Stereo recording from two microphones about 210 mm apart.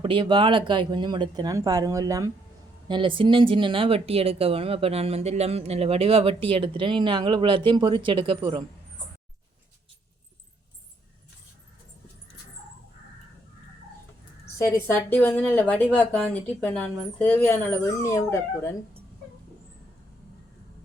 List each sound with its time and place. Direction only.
0.0 s speech: 25° right (ahead or behind)
14.7 s speech: 10° left (ahead or behind)